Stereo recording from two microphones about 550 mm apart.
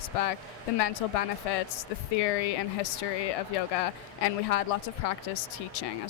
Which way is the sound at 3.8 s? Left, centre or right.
Left.